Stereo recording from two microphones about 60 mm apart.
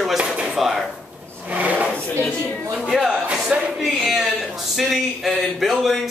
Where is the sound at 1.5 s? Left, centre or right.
Right.